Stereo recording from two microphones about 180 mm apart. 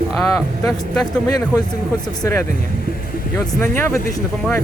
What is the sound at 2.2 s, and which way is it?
Speech, 15° left (ahead or behind).